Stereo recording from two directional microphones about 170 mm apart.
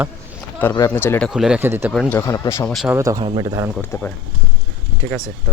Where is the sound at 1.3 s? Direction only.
5° right (ahead or behind).